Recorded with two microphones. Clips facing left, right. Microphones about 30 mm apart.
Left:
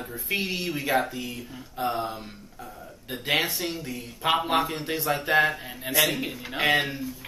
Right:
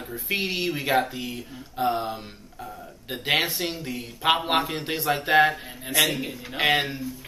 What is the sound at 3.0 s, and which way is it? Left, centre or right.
Speech, right.